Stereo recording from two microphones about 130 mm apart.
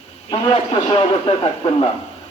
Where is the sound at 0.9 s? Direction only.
40° left (ahead or behind).